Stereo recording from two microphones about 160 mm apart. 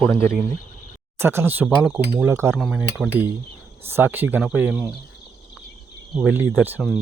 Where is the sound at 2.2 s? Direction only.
15° right (ahead or behind).